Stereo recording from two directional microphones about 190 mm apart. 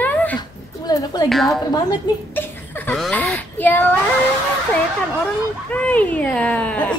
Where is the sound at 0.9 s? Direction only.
20° left (ahead or behind).